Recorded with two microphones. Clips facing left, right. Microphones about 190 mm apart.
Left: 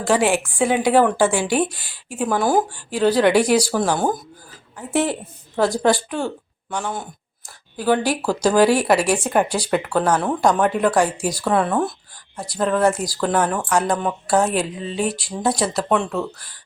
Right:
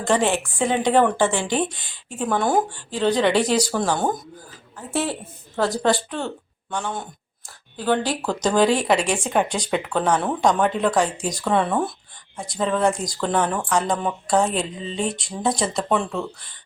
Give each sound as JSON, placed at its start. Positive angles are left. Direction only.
{"t": 0.0, "sound": "a woman's voice", "side_deg": 10}